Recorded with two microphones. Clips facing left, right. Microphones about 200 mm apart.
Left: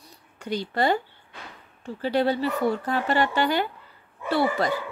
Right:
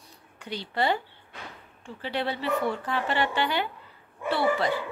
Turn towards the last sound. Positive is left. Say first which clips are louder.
# left 2 dB
turn(degrees=40)  # may be behind; listen again after turning